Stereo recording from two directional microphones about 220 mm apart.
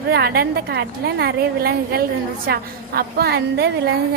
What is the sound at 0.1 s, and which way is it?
A woman's voice, 45° right (ahead or behind).